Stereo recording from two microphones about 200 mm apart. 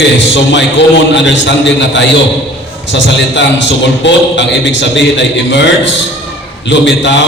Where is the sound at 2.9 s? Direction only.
60° left (ahead or behind).